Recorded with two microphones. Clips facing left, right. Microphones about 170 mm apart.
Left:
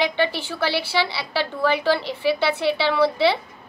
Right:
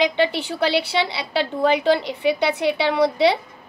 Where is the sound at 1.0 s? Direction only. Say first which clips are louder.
Right 2 dB; 20° right (ahead or behind).